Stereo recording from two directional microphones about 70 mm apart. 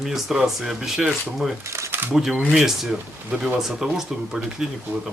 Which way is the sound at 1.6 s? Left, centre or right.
Right.